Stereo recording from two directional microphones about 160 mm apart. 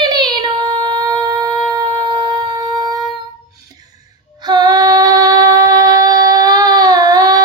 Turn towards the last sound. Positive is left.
turn(degrees=-25)  # may be behind; listen again after turning